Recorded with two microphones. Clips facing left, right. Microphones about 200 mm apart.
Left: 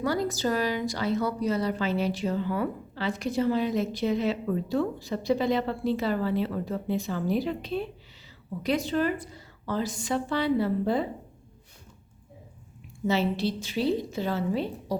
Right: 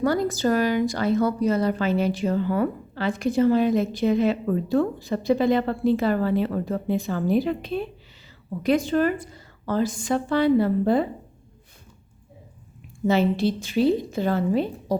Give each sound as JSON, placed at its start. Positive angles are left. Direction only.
{"t": 0.0, "sound": "a woman's voice", "side_deg": -50}
{"t": 13.1, "sound": "a woman's voice", "side_deg": -50}